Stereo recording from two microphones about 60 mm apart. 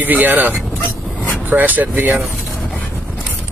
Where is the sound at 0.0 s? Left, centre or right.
Right.